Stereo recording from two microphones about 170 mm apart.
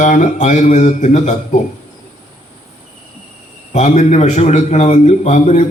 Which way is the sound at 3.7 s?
40° left (ahead or behind).